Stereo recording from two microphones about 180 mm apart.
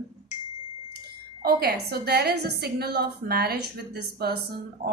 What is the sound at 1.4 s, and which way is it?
A woman's voice, 55° right (ahead or behind).